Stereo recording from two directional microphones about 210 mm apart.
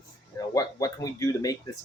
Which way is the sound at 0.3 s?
15° left (ahead or behind).